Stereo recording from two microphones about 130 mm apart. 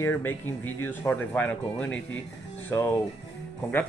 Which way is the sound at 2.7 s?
25° left (ahead or behind).